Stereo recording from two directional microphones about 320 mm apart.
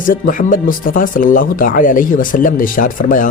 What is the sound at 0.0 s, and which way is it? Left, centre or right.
Speech, left.